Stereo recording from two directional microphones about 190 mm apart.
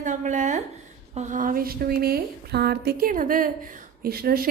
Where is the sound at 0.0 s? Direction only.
40° right (ahead or behind).